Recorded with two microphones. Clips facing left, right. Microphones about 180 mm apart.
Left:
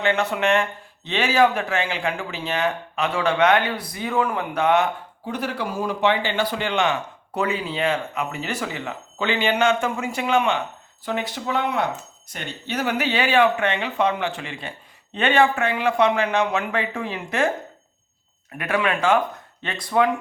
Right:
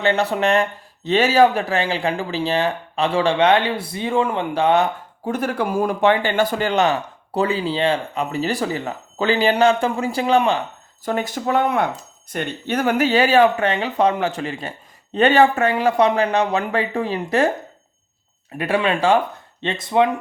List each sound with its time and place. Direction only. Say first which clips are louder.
0.0 s speech: right 3 dB; 35° right (ahead or behind)
5.2 s speech: right 5 dB; 50° right (ahead or behind)
18.5 s speech: right 3 dB; 30° right (ahead or behind)